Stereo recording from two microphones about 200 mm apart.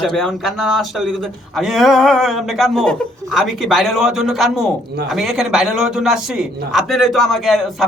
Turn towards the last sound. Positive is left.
turn(degrees=0)  # may be behind; listen again after turning